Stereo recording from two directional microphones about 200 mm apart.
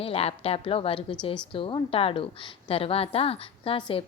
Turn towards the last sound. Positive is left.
turn(degrees=25)  # may be behind; listen again after turning